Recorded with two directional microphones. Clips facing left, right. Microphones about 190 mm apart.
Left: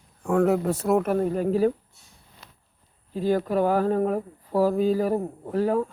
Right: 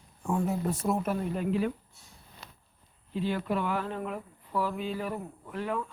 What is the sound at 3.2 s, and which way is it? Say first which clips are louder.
Speech: left 7 dB; 40° left (ahead or behind).